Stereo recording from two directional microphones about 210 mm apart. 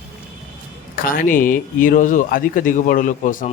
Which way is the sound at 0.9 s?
40° left (ahead or behind).